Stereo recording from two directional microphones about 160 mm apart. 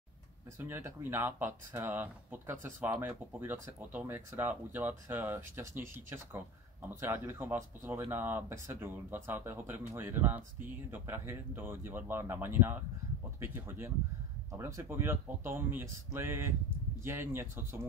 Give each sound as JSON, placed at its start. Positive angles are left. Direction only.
{"t": 0.7, "sound": "speech", "side_deg": -15}